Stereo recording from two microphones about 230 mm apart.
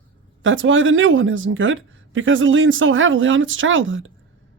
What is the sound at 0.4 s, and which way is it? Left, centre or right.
Speech, right.